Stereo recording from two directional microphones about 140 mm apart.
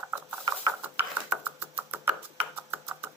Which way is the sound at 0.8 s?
15° right (ahead or behind).